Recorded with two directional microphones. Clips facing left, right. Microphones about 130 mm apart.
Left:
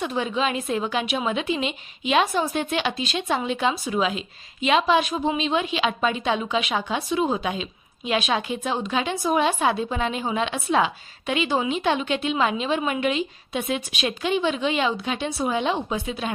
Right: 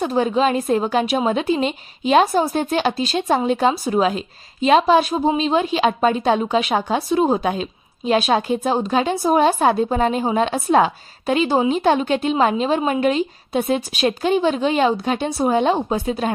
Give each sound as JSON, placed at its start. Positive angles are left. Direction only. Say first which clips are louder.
{"t": 0.0, "sound": "a woman's voice", "louder": "right 7 dB", "side_deg": -40}